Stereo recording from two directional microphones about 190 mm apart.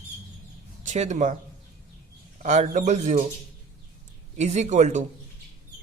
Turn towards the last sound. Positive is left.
turn(degrees=-40)  # may be behind; listen again after turning